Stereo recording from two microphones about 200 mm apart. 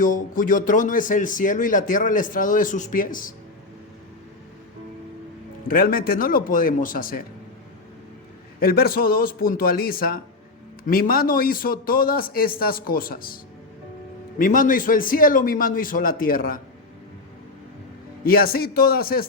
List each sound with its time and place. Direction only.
0.0 s a man's voice: 40° left (ahead or behind)
5.6 s a man's voice: 45° left (ahead or behind)
8.5 s a man's voice: 50° left (ahead or behind)
18.2 s a man's voice: 50° left (ahead or behind)